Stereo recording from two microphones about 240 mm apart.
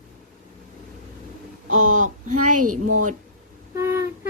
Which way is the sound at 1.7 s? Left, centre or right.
Right.